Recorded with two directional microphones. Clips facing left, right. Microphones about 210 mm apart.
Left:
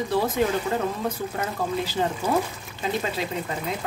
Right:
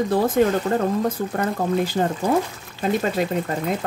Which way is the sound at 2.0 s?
50° right (ahead or behind).